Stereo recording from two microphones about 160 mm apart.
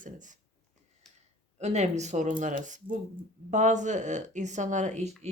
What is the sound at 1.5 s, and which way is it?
Speech, 45° right (ahead or behind).